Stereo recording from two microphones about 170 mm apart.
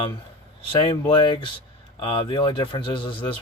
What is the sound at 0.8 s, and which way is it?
Speech, 25° left (ahead or behind).